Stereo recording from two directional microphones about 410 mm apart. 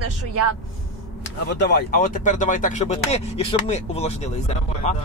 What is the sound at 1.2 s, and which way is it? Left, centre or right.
Speech, left.